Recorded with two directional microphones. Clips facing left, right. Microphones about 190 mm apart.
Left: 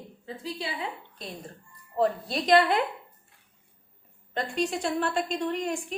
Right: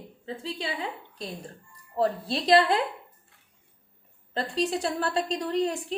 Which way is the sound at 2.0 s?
30° right (ahead or behind).